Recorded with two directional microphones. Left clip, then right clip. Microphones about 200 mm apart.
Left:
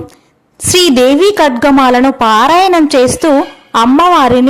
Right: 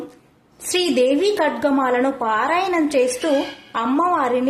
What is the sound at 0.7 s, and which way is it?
A woman's voice, 45° left (ahead or behind).